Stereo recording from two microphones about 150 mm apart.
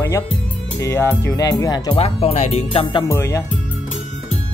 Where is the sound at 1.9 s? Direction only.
40° left (ahead or behind).